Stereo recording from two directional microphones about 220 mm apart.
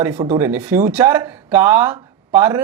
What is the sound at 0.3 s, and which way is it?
Speech, 10° right (ahead or behind).